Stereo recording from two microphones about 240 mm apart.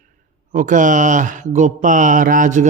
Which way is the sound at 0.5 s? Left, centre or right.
Right.